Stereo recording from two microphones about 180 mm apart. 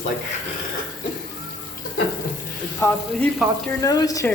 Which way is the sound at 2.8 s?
15° left (ahead or behind).